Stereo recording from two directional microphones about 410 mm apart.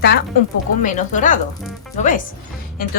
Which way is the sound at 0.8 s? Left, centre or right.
Centre.